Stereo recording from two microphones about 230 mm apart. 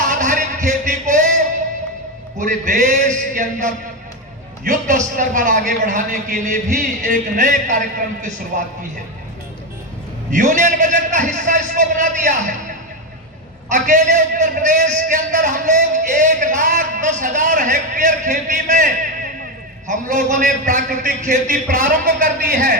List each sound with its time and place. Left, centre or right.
0.0 s a sound: right
2.6 s a man's voice: right
10.3 s a man's voice: right
13.7 s a man's voice: right